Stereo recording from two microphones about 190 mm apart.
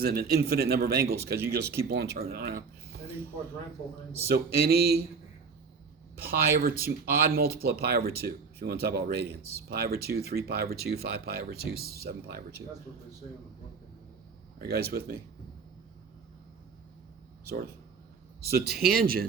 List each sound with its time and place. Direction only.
0.0 s speech: 55° right (ahead or behind)
4.5 s speech: 55° right (ahead or behind)
6.2 s speech: 50° right (ahead or behind)
14.6 s speech: 55° right (ahead or behind)
18.4 s speech: 55° right (ahead or behind)